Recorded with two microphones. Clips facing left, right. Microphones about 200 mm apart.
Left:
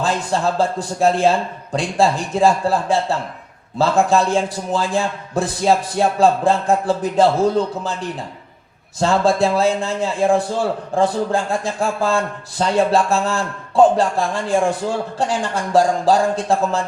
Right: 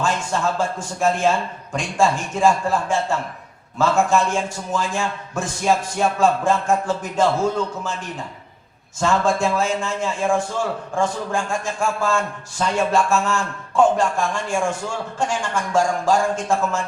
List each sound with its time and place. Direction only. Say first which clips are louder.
0.0 s a man's voice: left 3 dB; 35° left (ahead or behind)
9.0 s a man's voice: left 3 dB; 35° left (ahead or behind)